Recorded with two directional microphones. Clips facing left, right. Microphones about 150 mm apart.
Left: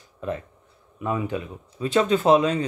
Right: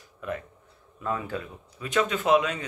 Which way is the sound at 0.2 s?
30° left (ahead or behind).